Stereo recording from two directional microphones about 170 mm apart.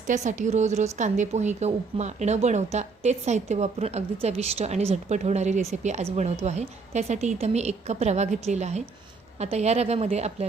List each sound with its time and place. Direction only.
0.1 s a woman's voice: 45° right (ahead or behind)